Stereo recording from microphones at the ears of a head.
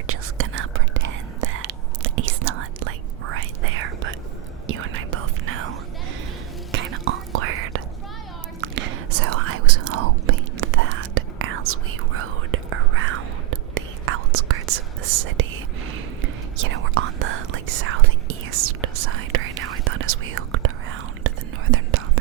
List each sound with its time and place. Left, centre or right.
0.1 s whispering: right